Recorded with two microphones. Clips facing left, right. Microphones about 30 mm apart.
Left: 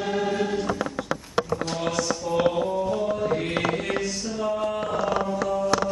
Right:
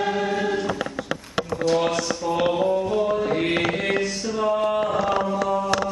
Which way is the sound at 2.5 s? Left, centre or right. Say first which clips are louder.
Right 4 dB; right.